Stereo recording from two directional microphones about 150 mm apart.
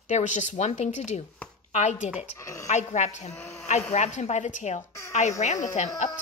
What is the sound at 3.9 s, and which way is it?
A woman's voice, 50° left (ahead or behind).